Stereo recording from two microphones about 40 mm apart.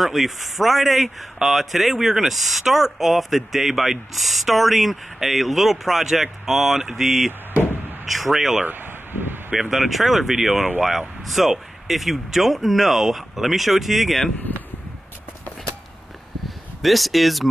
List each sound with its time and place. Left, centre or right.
0.0 s speech: centre
8.6 s a sound: right
9.7 s speech: centre
16.4 s speech: centre